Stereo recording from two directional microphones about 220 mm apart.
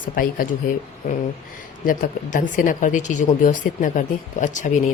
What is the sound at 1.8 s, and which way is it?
Speech, 40° left (ahead or behind).